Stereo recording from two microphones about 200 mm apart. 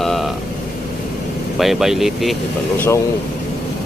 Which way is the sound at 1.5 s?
Centre (ahead or behind).